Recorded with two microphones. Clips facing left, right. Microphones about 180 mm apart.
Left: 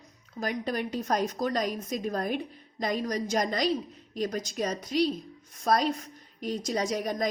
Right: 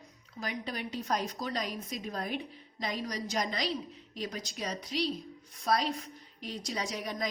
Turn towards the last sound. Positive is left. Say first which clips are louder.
# left 7 dB
turn(degrees=45)  # may be behind; listen again after turning